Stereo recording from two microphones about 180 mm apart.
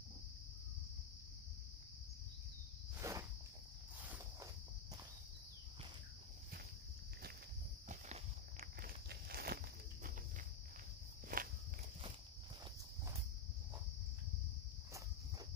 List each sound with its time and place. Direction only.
3.0 s walk: 15° right (ahead or behind)
8.5 s walk: 55° right (ahead or behind)
11.3 s walk: 50° right (ahead or behind)